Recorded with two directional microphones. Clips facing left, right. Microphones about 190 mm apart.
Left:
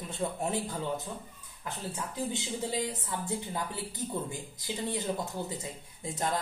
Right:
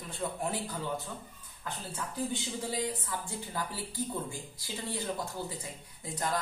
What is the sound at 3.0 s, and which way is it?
Speech, 20° left (ahead or behind).